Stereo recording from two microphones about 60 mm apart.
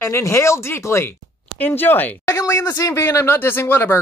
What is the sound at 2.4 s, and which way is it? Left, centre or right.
Speech, left.